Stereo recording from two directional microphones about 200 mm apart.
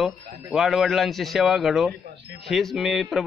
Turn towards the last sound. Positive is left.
turn(degrees=0)  # may be behind; listen again after turning